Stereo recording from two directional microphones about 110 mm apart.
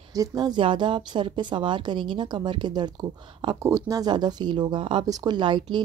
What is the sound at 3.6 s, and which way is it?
Speech, 30° right (ahead or behind).